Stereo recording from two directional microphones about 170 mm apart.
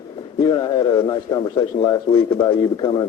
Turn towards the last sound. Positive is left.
turn(degrees=30)  # may be behind; listen again after turning